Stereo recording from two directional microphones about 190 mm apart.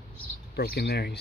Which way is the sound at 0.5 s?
55° left (ahead or behind).